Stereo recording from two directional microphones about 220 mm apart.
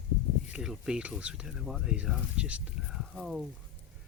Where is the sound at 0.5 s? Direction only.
5° right (ahead or behind).